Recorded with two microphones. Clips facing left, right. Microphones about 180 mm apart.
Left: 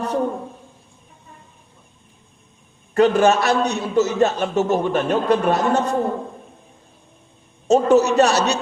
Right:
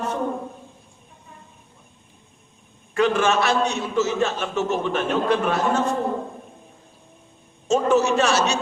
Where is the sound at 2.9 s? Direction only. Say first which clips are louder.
Left 5 dB; 40° left (ahead or behind).